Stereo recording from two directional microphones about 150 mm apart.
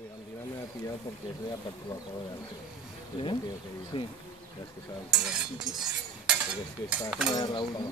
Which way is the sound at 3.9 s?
35° left (ahead or behind).